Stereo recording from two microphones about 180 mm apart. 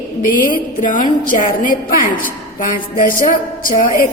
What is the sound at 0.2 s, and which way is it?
A woman's voice, 50° left (ahead or behind).